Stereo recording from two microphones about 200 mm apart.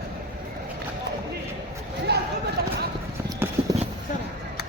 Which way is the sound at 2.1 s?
55° right (ahead or behind).